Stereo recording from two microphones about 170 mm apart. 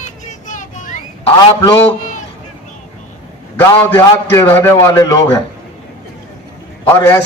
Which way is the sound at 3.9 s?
15° left (ahead or behind).